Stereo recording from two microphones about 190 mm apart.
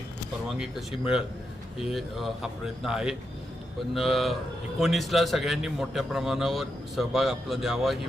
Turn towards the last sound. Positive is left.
turn(degrees=0)  # may be behind; listen again after turning